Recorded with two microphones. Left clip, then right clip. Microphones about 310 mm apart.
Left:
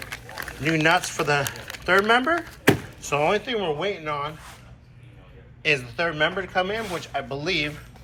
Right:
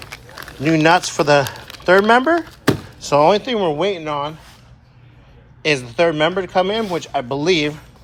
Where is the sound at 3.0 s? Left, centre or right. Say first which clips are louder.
Right 9 dB; centre.